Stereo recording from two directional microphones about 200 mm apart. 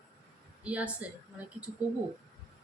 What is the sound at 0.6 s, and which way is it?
Speech, 5° right (ahead or behind).